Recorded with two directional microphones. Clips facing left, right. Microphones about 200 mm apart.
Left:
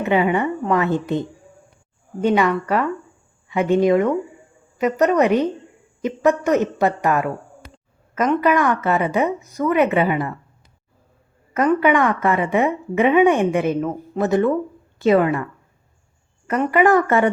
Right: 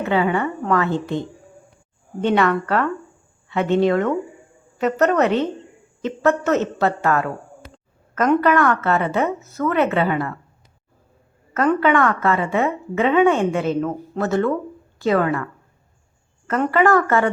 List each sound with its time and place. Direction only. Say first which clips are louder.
0.0 s a woman's voice: left 1 dB; 15° left (ahead or behind)
2.2 s a woman's voice: left 1 dB; 10° left (ahead or behind)
8.4 s a woman's voice: even; 10° left (ahead or behind)
11.5 s a woman's voice: left 1 dB; 10° left (ahead or behind)
16.5 s a woman's voice: left 1 dB; 15° left (ahead or behind)